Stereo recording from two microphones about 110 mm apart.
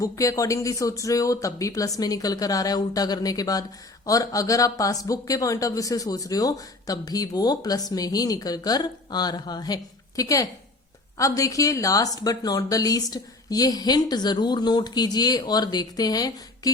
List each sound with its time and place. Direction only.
0.0 s speech: 30° left (ahead or behind)